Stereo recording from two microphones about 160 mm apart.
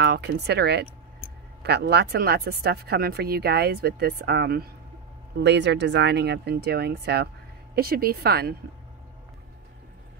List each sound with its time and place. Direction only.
0.0 s speech: 90° right
7.7 s speech: 70° right (ahead or behind)